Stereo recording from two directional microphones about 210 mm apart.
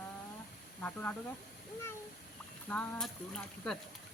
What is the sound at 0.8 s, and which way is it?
Speech, 5° left (ahead or behind).